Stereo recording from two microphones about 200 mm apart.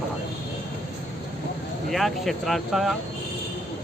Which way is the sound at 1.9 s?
Centre (ahead or behind).